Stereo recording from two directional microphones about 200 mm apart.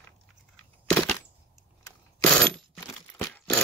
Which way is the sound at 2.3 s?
5° left (ahead or behind).